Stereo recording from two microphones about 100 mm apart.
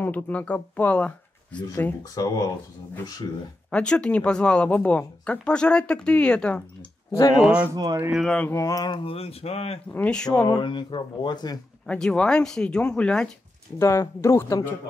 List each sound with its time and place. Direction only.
0.0 s speech: 15° left (ahead or behind)
2.1 s speech: 35° left (ahead or behind)
3.7 s speech: 10° left (ahead or behind)
7.1 s speech: 35° left (ahead or behind)
7.4 s speech: 10° right (ahead or behind)
7.7 s speech: 45° right (ahead or behind)
8.1 s speech: centre (ahead or behind)
8.5 s speech: 35° left (ahead or behind)
8.9 s speech: 70° left (ahead or behind); by 9.8 s 85° left
9.9 s speech: 10° left (ahead or behind)
10.6 s speech: 50° left (ahead or behind)
11.8 s speech: 5° left (ahead or behind)
13.7 s speech: 30° left (ahead or behind)